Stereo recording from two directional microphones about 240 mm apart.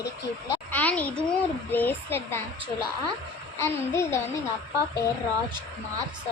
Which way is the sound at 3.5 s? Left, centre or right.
Centre.